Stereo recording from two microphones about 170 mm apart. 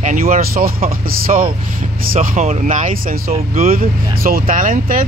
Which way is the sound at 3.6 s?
60° right (ahead or behind).